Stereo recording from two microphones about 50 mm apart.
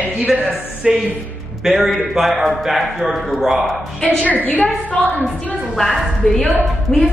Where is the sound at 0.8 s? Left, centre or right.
Centre.